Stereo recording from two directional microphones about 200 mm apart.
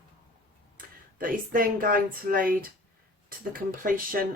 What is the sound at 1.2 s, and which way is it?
Speech, 45° right (ahead or behind).